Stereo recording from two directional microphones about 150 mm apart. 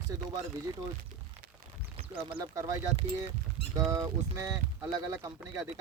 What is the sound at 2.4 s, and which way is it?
Speech, 20° right (ahead or behind).